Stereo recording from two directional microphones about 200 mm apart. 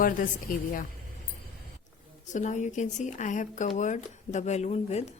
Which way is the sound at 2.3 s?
40° left (ahead or behind).